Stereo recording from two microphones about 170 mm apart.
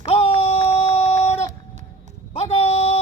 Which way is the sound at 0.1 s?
35° left (ahead or behind).